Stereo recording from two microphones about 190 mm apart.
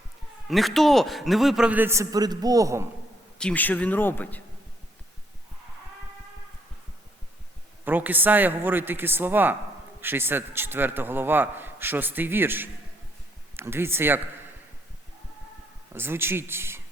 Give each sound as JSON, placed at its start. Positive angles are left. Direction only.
{"t": 0.4, "sound": "a man's voice", "side_deg": 0}
{"t": 3.3, "sound": "speech", "side_deg": 5}
{"t": 7.9, "sound": "a man's voice", "side_deg": -10}
{"t": 16.0, "sound": "a man's voice", "side_deg": -10}